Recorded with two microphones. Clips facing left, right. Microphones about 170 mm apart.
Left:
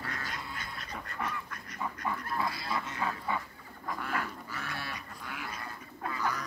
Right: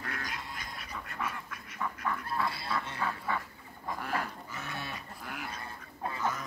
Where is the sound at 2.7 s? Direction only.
15° left (ahead or behind).